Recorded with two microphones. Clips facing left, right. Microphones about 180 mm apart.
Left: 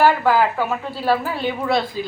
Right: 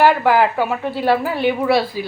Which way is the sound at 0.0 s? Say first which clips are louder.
Right 2 dB; 15° right (ahead or behind).